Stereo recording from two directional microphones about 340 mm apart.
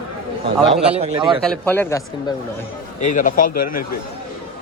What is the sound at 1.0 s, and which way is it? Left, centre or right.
Speech, centre.